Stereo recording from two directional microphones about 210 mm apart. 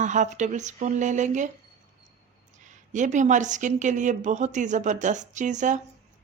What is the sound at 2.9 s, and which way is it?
Speech, 35° right (ahead or behind).